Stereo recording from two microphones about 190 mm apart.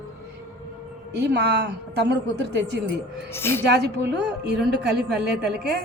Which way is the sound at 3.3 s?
10° left (ahead or behind).